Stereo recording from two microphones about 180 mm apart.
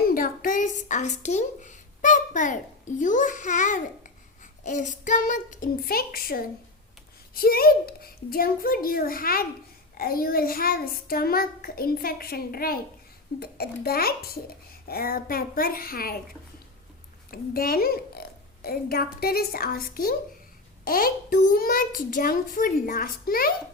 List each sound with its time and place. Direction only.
0.1 s a sound: 50° left (ahead or behind)
3.0 s a child's voice: 45° left (ahead or behind)
17.3 s a woman's voice: 55° left (ahead or behind)